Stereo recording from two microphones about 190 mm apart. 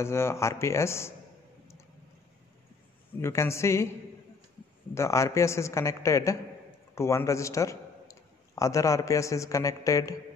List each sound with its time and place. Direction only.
0.0 s a man's voice: 15° left (ahead or behind)
3.2 s a man's voice: 15° left (ahead or behind)
4.9 s a man's voice: 15° left (ahead or behind)